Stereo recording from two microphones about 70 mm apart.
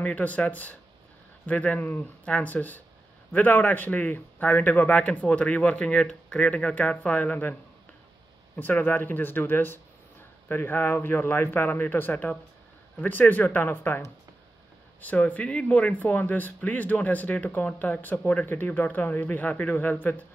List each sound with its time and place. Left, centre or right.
0.0 s speech: left
8.5 s speech: left